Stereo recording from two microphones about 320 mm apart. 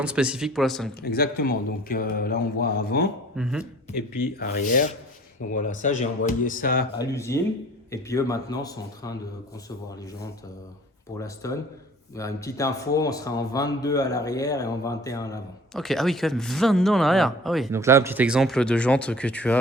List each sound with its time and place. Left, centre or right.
0.0 s speech: centre
1.0 s a man's voice: left
3.3 s speech: centre
4.4 s a man's voice: left
7.0 s speech: centre
11.2 s speech: centre